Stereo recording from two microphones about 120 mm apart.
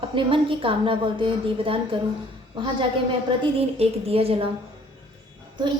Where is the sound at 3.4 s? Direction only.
55° right (ahead or behind).